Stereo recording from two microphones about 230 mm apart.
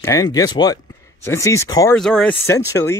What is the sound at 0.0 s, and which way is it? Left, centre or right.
Speech, centre.